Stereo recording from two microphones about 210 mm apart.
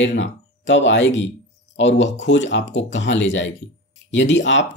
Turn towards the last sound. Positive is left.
turn(degrees=60)  # may be behind; listen again after turning